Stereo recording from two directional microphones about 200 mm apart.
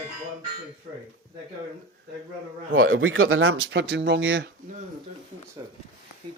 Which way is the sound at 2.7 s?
80° right.